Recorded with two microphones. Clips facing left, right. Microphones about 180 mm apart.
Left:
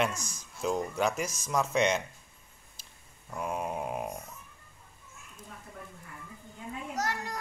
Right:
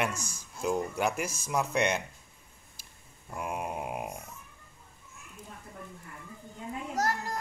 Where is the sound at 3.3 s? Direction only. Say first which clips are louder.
Left 1 dB; 10° right (ahead or behind).